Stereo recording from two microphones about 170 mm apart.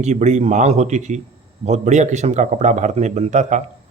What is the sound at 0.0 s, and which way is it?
A man's voice, 45° right (ahead or behind).